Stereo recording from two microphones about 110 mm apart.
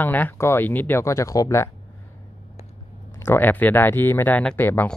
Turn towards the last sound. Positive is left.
turn(degrees=15)  # may be behind; listen again after turning